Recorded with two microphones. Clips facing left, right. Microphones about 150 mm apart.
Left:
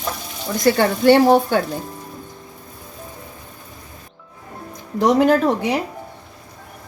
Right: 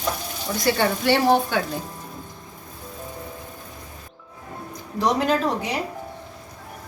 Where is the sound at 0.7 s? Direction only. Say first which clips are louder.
Left 8 dB; 45° left (ahead or behind).